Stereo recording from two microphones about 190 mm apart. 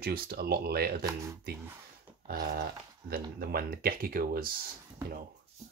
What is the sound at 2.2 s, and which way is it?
Speech, 55° right (ahead or behind).